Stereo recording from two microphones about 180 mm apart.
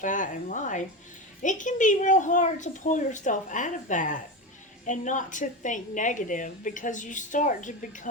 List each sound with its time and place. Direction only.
0.0 s a woman's voice: 45° left (ahead or behind)